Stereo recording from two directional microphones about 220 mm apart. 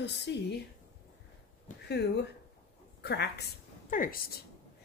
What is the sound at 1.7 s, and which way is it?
Speech, 35° left (ahead or behind).